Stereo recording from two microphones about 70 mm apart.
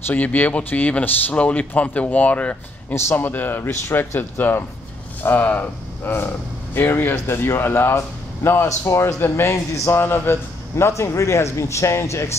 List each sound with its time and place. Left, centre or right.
0.0 s speech: left
2.9 s speech: left
8.6 s speech: left
9.9 s speech: left
10.8 s speech: left